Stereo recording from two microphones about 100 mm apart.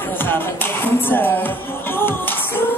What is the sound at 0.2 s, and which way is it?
Music, 20° left (ahead or behind).